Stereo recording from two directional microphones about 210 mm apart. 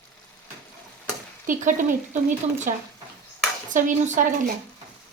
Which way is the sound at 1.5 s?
40° right (ahead or behind).